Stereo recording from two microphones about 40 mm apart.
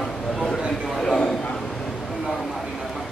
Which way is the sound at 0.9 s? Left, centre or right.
Centre.